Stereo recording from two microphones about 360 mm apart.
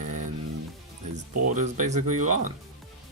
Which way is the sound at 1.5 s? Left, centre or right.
Right.